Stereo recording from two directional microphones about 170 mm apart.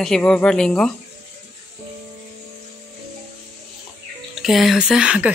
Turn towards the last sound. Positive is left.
turn(degrees=-5)  # may be behind; listen again after turning